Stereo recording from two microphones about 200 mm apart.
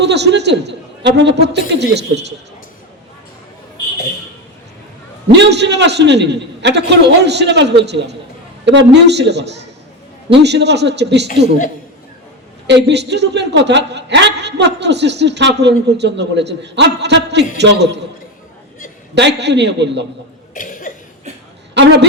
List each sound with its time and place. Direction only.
0.0 s a man's voice: 60° right (ahead or behind)
5.4 s a man's voice: 60° right (ahead or behind)
12.6 s a man's voice: 60° right (ahead or behind)
19.1 s a man's voice: 60° right (ahead or behind)
20.5 s cough: 40° left (ahead or behind)